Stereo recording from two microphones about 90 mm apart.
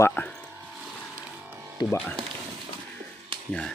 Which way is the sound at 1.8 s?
50° left (ahead or behind).